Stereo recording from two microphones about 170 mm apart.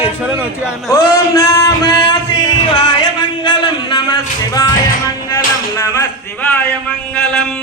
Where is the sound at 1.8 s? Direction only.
80° left.